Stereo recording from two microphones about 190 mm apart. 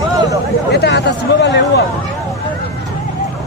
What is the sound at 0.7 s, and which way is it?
Speech, 60° left (ahead or behind).